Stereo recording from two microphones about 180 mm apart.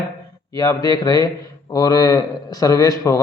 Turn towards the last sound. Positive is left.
turn(degrees=20)  # may be behind; listen again after turning